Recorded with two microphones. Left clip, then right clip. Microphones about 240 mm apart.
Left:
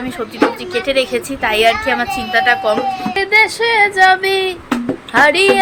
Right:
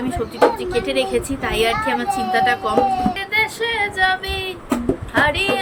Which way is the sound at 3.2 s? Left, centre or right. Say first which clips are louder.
Left 8 dB; centre.